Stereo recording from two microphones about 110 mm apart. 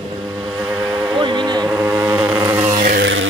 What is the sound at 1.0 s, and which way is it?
Speech, 40° right (ahead or behind).